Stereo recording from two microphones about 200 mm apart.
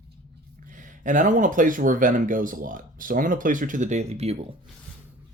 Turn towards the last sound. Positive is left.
turn(degrees=-30)  # may be behind; listen again after turning